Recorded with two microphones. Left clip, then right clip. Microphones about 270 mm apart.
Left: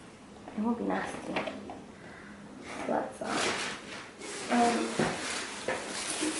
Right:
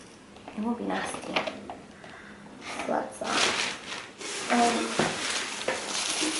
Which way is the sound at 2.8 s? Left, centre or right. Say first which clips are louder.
Right 2 dB; centre.